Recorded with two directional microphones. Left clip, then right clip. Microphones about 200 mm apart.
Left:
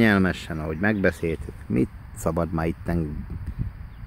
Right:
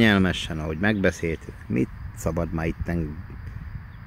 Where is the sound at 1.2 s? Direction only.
15° left (ahead or behind).